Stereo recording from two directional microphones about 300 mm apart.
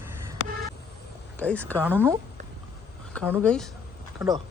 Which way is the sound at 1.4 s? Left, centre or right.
Centre.